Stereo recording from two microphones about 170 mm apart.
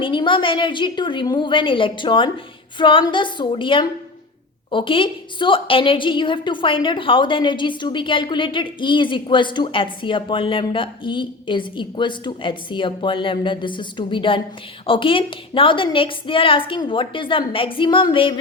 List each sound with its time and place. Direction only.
0.0 s a woman's voice: 30° left (ahead or behind)